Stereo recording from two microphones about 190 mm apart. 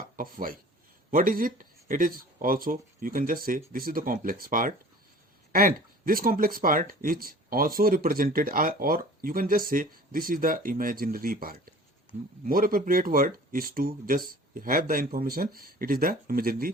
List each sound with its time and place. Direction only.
0.2 s speech: 50° right (ahead or behind)
12.1 s speech: 30° left (ahead or behind)
12.5 s speech: 50° right (ahead or behind)